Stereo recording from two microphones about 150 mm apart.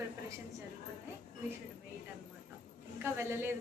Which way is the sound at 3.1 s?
15° right (ahead or behind).